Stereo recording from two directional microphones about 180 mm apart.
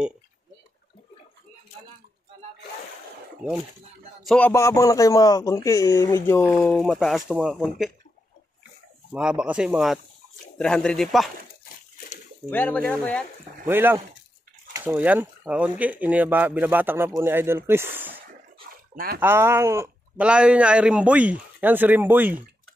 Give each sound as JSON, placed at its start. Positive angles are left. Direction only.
{"t": 4.2, "sound": "music", "side_deg": 0}
{"t": 4.5, "sound": "speech", "side_deg": 15}
{"t": 6.6, "sound": "speech", "side_deg": 5}
{"t": 9.1, "sound": "speech", "side_deg": -5}
{"t": 12.4, "sound": "speech", "side_deg": 10}
{"t": 13.7, "sound": "speech", "side_deg": -10}
{"t": 18.3, "sound": "dog", "side_deg": -55}
{"t": 19.1, "sound": "speech", "side_deg": -15}